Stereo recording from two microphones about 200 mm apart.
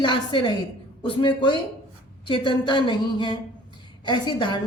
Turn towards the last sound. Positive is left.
turn(degrees=20)  # may be behind; listen again after turning